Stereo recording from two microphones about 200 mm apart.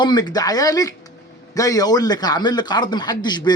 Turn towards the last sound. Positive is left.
turn(degrees=20)  # may be behind; listen again after turning